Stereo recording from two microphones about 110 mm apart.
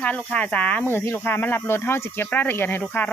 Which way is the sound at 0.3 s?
15° left (ahead or behind).